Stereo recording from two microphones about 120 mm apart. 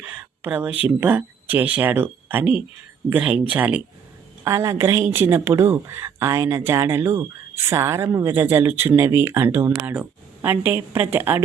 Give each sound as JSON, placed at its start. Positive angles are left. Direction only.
{"t": 0.0, "sound": "a sound", "side_deg": -15}
{"t": 0.9, "sound": "speech", "side_deg": -15}
{"t": 4.4, "sound": "a woman's voice", "side_deg": -25}